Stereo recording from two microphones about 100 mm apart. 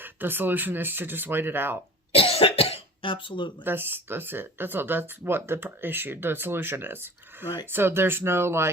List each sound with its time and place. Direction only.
0.0 s speech: 20° right (ahead or behind)
2.1 s cough: 70° left (ahead or behind); by 3.5 s 55° left (ahead or behind)
3.6 s speech: 20° right (ahead or behind)